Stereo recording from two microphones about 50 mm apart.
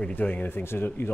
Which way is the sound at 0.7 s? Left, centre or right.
Left.